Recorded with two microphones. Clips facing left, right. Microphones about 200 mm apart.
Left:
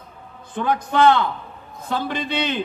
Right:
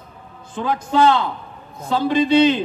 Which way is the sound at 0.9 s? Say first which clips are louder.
Right 1 dB; 55° left (ahead or behind).